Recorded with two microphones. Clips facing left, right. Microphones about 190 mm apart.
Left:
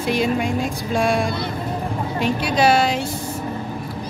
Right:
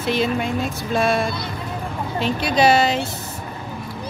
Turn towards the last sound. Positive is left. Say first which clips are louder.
# right 1 dB
turn(degrees=10)  # may be behind; listen again after turning